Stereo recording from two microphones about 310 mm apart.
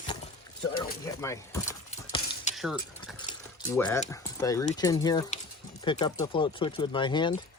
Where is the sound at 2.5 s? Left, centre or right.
Centre.